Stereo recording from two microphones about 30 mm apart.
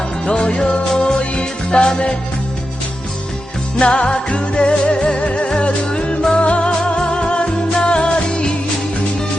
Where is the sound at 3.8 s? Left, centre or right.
Left.